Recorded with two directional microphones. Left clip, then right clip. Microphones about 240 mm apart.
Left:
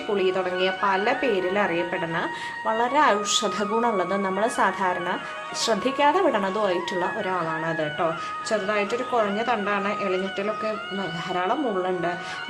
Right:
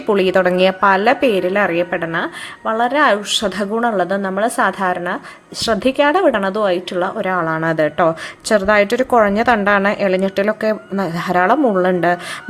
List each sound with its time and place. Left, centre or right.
0.2 s a woman's voice: right